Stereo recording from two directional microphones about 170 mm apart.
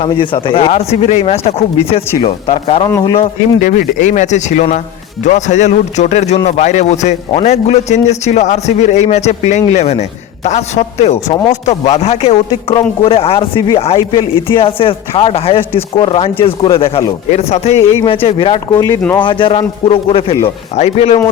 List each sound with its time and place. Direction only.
0.0 s speech: 30° left (ahead or behind)
3.6 s speech: 50° left (ahead or behind)
11.3 s speech: 20° left (ahead or behind)
11.6 s speech: 40° left (ahead or behind)